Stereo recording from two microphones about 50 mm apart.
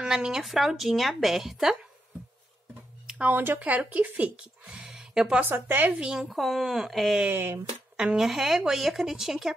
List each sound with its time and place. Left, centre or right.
0.0 s speech: centre
3.3 s speech: right
3.5 s speech: right
4.7 s a sound: centre
5.4 s speech: right
6.0 s speech: centre
6.3 s speech: centre
7.3 s speech: right
8.0 s speech: centre